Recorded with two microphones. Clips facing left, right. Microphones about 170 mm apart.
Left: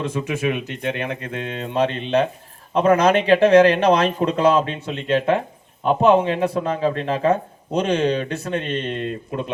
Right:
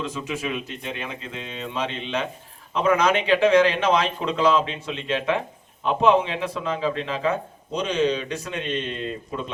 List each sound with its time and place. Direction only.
0.1 s speech: 60° left (ahead or behind)